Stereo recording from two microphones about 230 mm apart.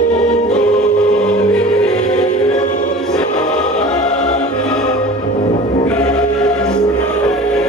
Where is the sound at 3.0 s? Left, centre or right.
Centre.